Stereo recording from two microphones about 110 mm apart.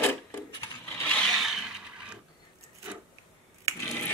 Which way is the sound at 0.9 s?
10° left (ahead or behind).